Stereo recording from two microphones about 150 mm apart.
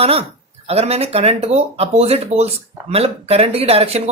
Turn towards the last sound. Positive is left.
turn(degrees=-45)  # may be behind; listen again after turning